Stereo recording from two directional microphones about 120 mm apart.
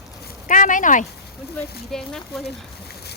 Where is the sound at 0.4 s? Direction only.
90° left.